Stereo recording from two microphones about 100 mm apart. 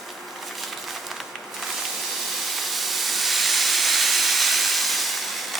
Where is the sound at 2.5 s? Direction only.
Centre (ahead or behind).